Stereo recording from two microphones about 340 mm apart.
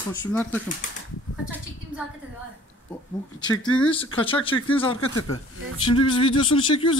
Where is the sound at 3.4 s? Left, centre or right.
Centre.